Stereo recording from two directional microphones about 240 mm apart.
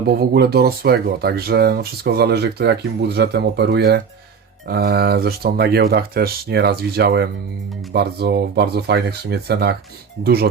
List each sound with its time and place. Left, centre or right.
0.2 s speech: right